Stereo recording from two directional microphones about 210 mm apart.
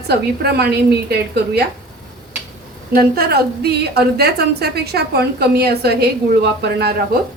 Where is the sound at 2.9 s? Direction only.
45° right (ahead or behind).